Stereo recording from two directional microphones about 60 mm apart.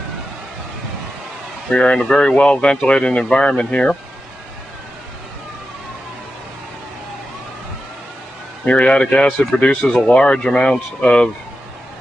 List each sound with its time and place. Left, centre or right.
1.7 s speech: centre
8.6 s a man's voice: centre